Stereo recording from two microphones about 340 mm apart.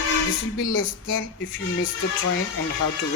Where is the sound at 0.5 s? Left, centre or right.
Left.